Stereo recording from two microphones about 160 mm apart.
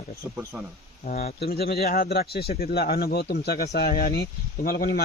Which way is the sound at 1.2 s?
75° left (ahead or behind).